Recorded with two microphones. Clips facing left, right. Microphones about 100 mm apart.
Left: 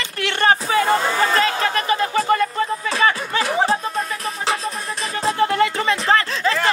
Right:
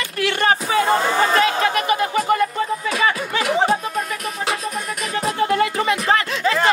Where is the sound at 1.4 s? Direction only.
35° left (ahead or behind).